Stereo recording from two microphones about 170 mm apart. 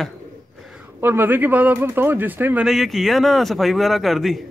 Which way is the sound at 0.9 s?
15° right (ahead or behind).